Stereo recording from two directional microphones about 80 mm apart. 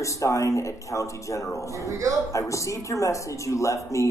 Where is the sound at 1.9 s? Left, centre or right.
Right.